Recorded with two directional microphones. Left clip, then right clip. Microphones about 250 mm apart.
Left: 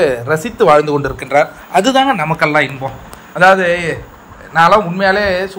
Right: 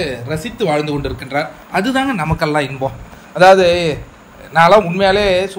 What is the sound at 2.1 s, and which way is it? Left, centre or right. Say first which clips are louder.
A man's voice: left 4 dB; right.